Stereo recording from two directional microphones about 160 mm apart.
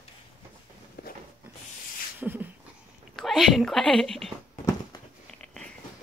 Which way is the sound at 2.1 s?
10° right (ahead or behind).